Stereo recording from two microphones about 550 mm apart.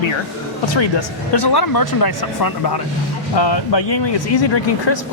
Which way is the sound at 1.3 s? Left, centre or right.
Left.